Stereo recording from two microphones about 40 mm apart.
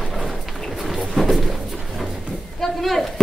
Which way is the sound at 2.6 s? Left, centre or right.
Centre.